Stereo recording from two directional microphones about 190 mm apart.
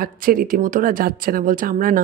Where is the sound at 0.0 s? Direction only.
50° right (ahead or behind).